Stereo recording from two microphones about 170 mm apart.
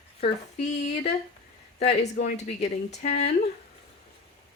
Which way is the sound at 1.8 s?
40° left (ahead or behind).